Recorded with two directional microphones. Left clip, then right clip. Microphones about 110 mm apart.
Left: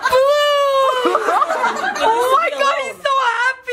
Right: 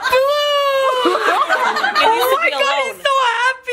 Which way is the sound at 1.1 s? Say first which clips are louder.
Even; 15° right (ahead or behind).